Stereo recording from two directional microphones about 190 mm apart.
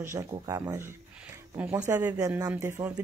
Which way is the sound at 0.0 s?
15° right (ahead or behind).